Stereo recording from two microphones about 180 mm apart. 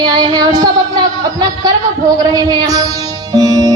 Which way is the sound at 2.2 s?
20° right (ahead or behind).